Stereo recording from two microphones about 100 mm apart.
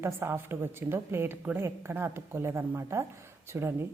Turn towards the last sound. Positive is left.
turn(degrees=-25)  # may be behind; listen again after turning